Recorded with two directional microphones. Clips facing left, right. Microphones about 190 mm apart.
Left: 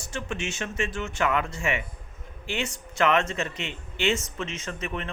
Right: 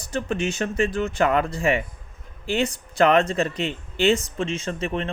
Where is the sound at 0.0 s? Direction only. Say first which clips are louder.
Right 7 dB; 35° right (ahead or behind).